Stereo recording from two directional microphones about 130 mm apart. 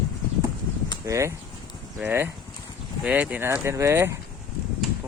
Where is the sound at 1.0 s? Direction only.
25° right (ahead or behind).